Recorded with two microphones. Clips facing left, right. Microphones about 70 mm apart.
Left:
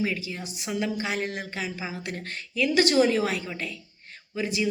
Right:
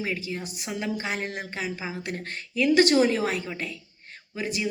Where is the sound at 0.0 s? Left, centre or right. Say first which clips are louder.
Left 1 dB; right.